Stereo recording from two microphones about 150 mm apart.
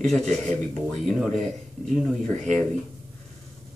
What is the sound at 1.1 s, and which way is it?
Speech, centre (ahead or behind).